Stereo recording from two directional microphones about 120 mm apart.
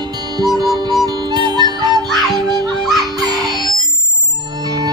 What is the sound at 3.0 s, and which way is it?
Music, 35° right (ahead or behind).